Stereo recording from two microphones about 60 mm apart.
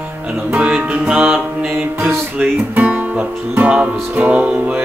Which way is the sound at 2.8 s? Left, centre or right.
Right.